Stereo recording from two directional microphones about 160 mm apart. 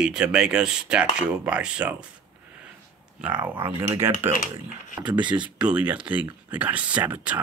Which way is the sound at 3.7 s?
15° right (ahead or behind).